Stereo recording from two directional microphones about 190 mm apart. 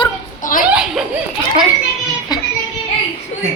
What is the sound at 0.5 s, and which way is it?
Chuckle, 45° left (ahead or behind).